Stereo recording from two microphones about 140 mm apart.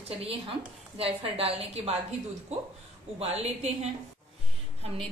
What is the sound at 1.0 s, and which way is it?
Speech, 45° right (ahead or behind).